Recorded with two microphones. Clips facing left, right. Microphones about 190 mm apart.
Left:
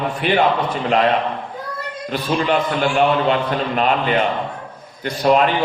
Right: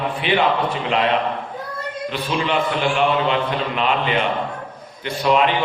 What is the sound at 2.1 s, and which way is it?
A man's voice, 45° left (ahead or behind).